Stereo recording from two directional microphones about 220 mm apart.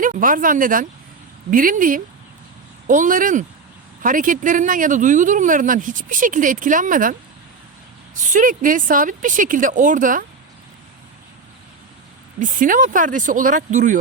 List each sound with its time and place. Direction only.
0.0 s speech: 35° right (ahead or behind)
12.4 s speech: 35° right (ahead or behind)